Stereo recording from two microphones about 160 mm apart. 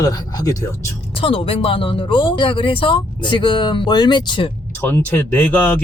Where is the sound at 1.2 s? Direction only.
35° left (ahead or behind).